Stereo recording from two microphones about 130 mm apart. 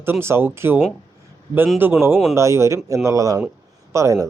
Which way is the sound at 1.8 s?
15° right (ahead or behind).